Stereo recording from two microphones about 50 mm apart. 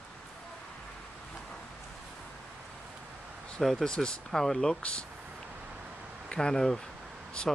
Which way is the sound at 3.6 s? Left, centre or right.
Centre.